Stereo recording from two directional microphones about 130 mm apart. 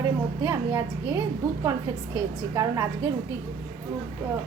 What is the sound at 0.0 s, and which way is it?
A woman's voice, 20° right (ahead or behind).